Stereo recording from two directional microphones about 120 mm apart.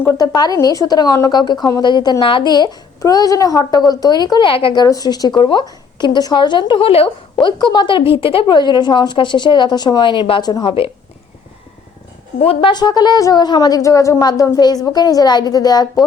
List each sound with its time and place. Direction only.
0.2 s a woman's voice: 30° left (ahead or behind); by 7.1 s 50° left (ahead or behind)
7.4 s a woman's voice: 40° left (ahead or behind)
12.4 s a woman's voice: 55° left (ahead or behind)
12.7 s a woman's voice: 35° left (ahead or behind)